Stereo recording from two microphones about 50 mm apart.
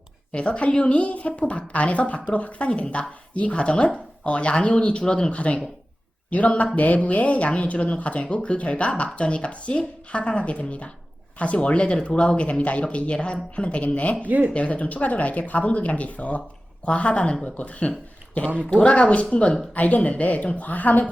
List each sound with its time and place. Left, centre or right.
0.3 s speech: left
14.2 s speech: right
14.5 s speech: left